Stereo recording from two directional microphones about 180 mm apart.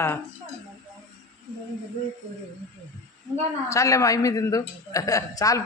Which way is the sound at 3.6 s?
15° left (ahead or behind).